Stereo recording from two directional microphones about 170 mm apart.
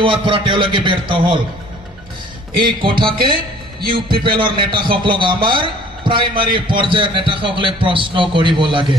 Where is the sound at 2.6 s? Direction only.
30° right (ahead or behind).